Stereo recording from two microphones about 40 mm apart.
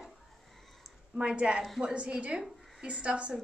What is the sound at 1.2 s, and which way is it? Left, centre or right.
A woman's voice, right.